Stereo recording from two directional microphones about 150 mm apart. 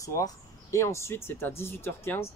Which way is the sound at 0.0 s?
20° left (ahead or behind).